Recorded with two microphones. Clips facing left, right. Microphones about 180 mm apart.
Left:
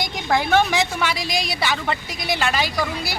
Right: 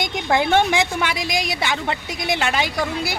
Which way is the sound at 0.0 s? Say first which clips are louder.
Right 2 dB; 20° right (ahead or behind).